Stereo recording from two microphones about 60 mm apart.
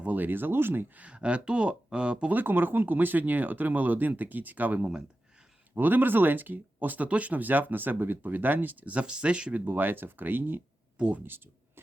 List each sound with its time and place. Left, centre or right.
0.0 s speech: right
1.0 s speech: centre
2.3 s speech: right; by 9.6 s centre
9.6 s speech: right
10.9 s speech: centre